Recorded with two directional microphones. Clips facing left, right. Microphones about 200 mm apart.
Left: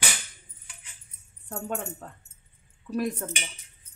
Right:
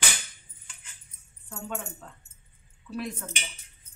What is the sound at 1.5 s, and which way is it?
Speech, 45° left (ahead or behind).